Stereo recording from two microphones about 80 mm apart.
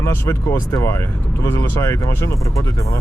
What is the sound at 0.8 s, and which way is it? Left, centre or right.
Speech, left.